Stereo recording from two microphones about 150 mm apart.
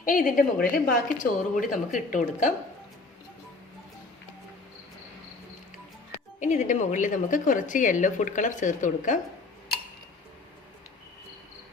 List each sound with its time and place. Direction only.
0.0 s a woman's voice: 65° left (ahead or behind)
6.4 s a woman's voice: 55° left (ahead or behind)